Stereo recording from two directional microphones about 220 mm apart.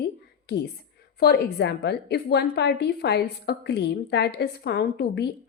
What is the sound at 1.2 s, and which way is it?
A woman's voice, 45° left (ahead or behind).